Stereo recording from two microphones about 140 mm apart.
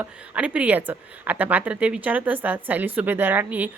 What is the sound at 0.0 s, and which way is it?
A woman's voice, 10° right (ahead or behind).